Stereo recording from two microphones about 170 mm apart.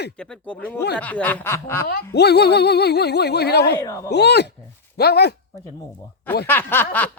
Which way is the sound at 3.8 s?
20° left (ahead or behind).